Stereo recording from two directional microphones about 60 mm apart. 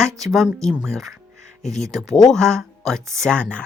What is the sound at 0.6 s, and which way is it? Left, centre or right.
Speech, right.